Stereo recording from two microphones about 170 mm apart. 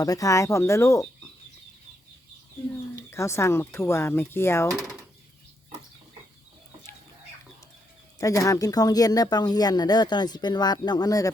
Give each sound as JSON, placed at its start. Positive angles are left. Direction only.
{"t": 0.0, "sound": "speech", "side_deg": 20}
{"t": 2.9, "sound": "speech", "side_deg": 15}
{"t": 8.2, "sound": "speech", "side_deg": 20}